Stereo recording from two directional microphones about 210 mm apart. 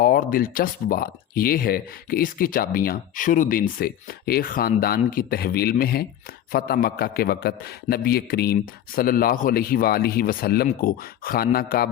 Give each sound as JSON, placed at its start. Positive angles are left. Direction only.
{"t": 0.0, "sound": "speech", "side_deg": 40}